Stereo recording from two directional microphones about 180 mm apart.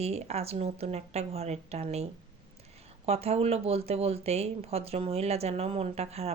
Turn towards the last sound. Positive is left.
turn(degrees=-35)  # may be behind; listen again after turning